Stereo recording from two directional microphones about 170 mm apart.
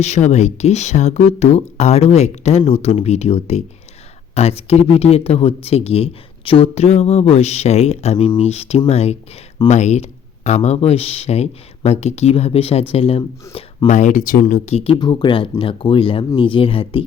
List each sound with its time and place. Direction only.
0.0 s speech: 40° left (ahead or behind)
14.9 s speech: 25° left (ahead or behind)